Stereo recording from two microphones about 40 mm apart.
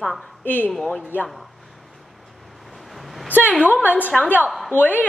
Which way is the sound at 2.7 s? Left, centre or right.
Centre.